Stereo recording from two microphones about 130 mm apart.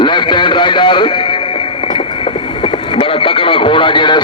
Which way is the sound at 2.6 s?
45° left (ahead or behind).